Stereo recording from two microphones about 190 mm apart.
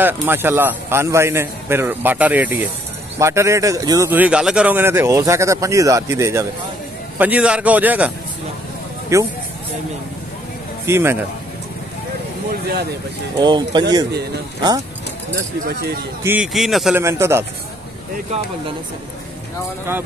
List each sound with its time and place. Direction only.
0.0 s speech: 10° right (ahead or behind)
9.1 s speech: 15° right (ahead or behind)
10.9 s speech: 10° right (ahead or behind)
13.4 s speech: 25° right (ahead or behind)
15.3 s speech: 55° right (ahead or behind)
16.2 s a man's voice: 10° right (ahead or behind)
17.0 s speech: 15° right (ahead or behind)